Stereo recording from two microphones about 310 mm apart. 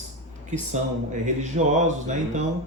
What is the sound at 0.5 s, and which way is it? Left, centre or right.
Speech, right.